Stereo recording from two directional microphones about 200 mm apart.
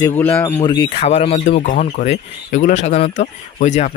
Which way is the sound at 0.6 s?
20° left (ahead or behind).